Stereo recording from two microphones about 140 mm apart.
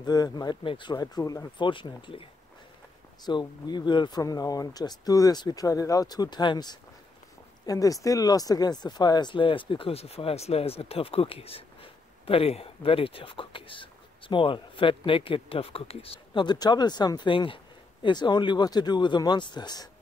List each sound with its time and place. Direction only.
0.0 s speech: 30° left (ahead or behind)
3.3 s speech: 30° left (ahead or behind)